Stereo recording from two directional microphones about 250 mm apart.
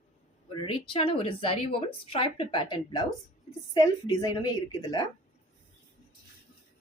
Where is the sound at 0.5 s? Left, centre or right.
Left.